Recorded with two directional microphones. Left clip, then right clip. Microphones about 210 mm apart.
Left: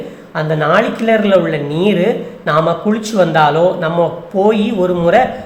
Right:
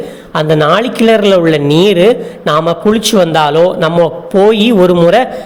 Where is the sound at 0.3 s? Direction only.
40° right (ahead or behind).